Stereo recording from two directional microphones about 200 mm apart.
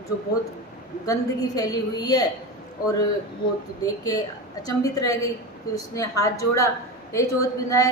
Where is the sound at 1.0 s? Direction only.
20° left (ahead or behind).